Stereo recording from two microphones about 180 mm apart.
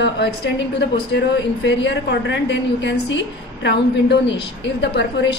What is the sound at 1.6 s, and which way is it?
A woman's voice, 80° left.